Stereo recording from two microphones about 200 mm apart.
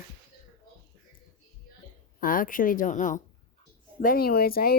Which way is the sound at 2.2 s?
45° left (ahead or behind).